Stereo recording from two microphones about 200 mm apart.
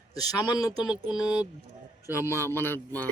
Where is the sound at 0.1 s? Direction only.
20° left (ahead or behind).